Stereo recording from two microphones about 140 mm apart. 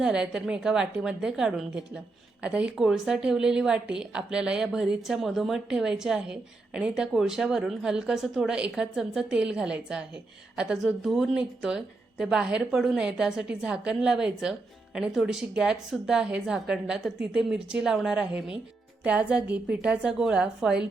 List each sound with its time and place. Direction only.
0.0 s a woman's voice: 5° right (ahead or behind)